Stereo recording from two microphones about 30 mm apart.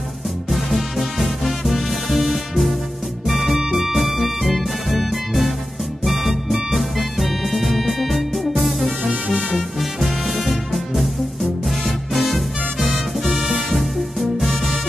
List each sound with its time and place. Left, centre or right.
0.5 s music: centre
9.1 s music: right
10.0 s music: centre
13.7 s music: centre